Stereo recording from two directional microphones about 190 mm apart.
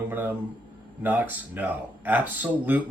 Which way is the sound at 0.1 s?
10° right (ahead or behind).